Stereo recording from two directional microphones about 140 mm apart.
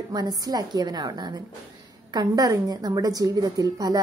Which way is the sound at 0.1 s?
30° right (ahead or behind).